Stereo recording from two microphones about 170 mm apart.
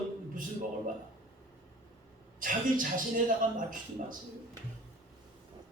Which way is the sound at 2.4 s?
50° right (ahead or behind).